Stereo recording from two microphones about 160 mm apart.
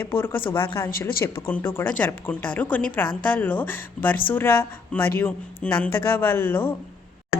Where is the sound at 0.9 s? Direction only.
65° left (ahead or behind).